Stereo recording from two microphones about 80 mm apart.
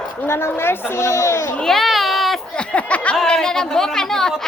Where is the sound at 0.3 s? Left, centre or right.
Left.